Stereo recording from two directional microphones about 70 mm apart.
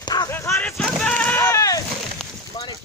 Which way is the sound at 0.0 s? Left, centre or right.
Left.